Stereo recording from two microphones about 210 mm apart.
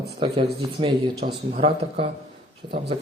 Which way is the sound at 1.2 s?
50° right (ahead or behind).